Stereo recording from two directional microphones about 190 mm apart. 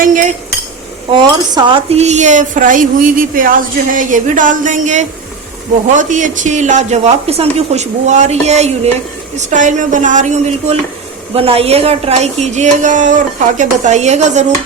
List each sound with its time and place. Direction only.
0.0 s cutlery: 40° right (ahead or behind)
1.1 s speech: 25° right (ahead or behind)